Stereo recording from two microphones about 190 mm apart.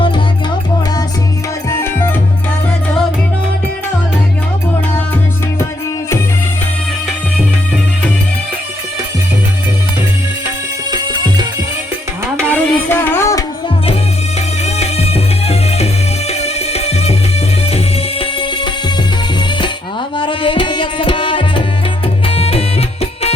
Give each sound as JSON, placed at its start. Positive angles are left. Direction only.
{"t": 1.7, "sound": "music", "side_deg": 10}
{"t": 10.9, "sound": "music", "side_deg": -20}
{"t": 12.4, "sound": "music", "side_deg": 10}
{"t": 14.6, "sound": "music", "side_deg": 35}
{"t": 18.2, "sound": "music", "side_deg": 25}
{"t": 20.1, "sound": "tabla", "side_deg": 25}
{"t": 22.3, "sound": "music", "side_deg": 30}